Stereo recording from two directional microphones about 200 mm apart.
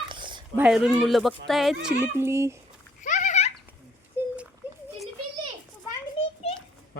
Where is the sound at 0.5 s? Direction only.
5° right (ahead or behind).